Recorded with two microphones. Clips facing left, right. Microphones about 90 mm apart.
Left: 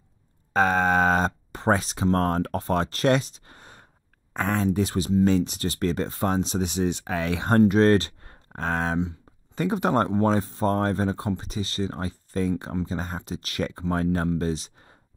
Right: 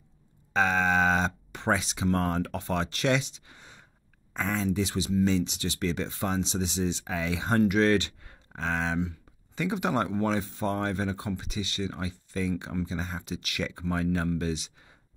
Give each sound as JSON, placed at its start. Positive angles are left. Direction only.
{"t": 0.5, "sound": "speech", "side_deg": 45}
{"t": 4.3, "sound": "speech", "side_deg": 60}
{"t": 4.6, "sound": "speech", "side_deg": 45}
{"t": 7.6, "sound": "speech", "side_deg": 40}